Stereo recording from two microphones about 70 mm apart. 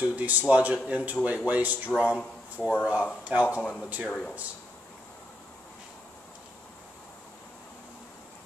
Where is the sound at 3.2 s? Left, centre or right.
Centre.